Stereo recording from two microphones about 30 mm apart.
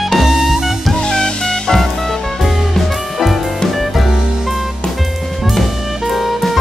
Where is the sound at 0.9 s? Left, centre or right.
Left.